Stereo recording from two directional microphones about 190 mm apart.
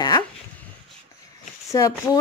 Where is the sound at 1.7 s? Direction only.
15° left (ahead or behind).